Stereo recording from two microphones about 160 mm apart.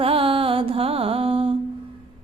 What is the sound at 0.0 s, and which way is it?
Music, 35° right (ahead or behind).